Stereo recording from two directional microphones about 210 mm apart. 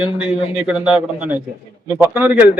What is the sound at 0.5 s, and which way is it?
A man's voice, 5° right (ahead or behind).